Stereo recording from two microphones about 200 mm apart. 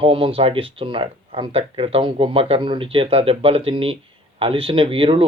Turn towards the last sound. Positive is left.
turn(degrees=-25)  # may be behind; listen again after turning